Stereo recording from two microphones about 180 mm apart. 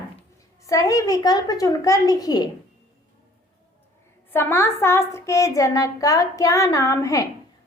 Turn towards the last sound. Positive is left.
turn(degrees=15)  # may be behind; listen again after turning